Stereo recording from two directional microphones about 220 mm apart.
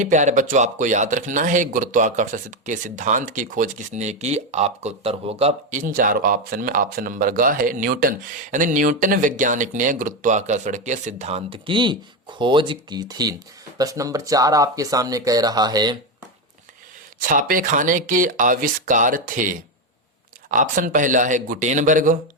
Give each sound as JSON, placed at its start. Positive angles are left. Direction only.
{"t": 0.0, "sound": "speech", "side_deg": -35}
{"t": 17.2, "sound": "speech", "side_deg": -35}